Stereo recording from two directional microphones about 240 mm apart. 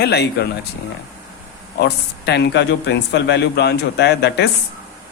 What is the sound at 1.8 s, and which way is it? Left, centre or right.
Speech, left.